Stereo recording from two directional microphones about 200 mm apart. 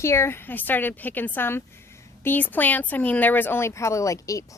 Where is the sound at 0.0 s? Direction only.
15° left (ahead or behind).